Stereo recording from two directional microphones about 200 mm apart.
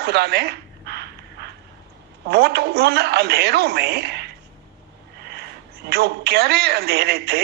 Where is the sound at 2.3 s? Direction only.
55° right (ahead or behind).